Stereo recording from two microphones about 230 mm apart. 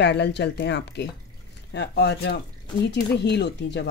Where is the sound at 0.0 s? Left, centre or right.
Left.